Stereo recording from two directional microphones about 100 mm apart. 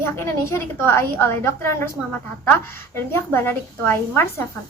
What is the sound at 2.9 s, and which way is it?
A woman's voice, 25° left (ahead or behind).